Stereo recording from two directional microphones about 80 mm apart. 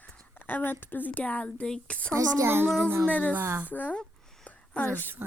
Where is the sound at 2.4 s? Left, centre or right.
Right.